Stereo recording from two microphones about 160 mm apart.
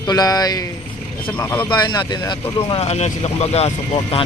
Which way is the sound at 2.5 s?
40° left (ahead or behind).